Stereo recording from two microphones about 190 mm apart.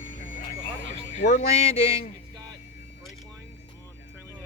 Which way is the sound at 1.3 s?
35° left (ahead or behind).